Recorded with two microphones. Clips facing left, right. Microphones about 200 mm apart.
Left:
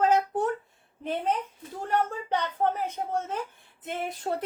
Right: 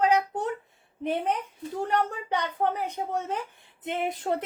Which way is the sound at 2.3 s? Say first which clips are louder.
Even; 15° right (ahead or behind).